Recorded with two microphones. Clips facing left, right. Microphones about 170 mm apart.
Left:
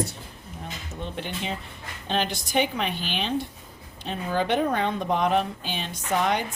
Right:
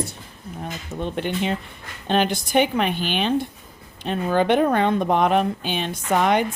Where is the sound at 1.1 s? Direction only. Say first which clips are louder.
Right 8 dB; 60° right (ahead or behind).